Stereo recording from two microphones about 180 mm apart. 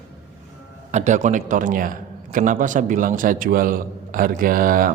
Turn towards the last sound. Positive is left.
turn(degrees=-50)  # may be behind; listen again after turning